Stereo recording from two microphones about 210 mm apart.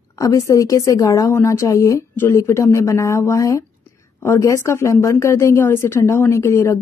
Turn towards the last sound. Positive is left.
turn(degrees=15)  # may be behind; listen again after turning